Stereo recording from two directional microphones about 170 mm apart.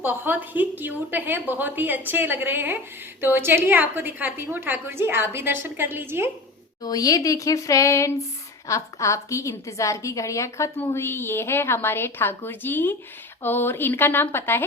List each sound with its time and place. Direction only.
0.0 s a woman's voice: 10° right (ahead or behind)
6.8 s a woman's voice: 20° left (ahead or behind)